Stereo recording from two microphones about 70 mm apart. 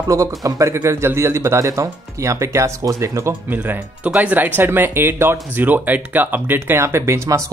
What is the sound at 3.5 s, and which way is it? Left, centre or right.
Speech, right.